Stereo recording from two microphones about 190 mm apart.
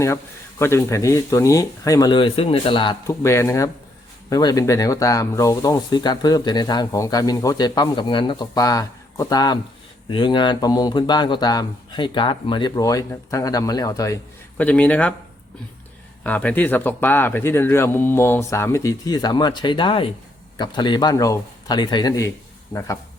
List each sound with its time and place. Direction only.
0.6 s speech: 15° left (ahead or behind)
16.2 s speech: 10° left (ahead or behind)